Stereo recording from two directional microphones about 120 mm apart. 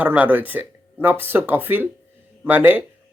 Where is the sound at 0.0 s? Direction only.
15° right (ahead or behind).